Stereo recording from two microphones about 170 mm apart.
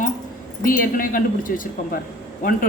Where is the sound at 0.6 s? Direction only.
55° left (ahead or behind).